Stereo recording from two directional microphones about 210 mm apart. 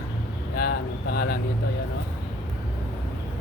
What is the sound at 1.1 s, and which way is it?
Speech, 50° left (ahead or behind).